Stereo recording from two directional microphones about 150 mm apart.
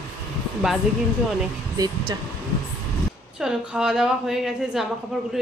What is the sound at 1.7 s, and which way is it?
Speech, 25° right (ahead or behind).